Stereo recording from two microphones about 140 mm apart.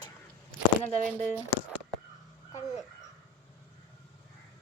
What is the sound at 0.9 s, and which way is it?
Speech, 10° left (ahead or behind).